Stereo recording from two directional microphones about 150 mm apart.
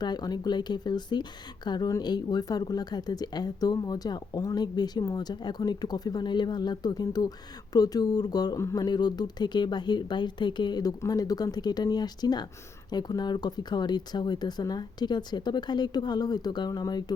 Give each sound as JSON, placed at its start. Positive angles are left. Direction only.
{"t": 0.0, "sound": "speech", "side_deg": 25}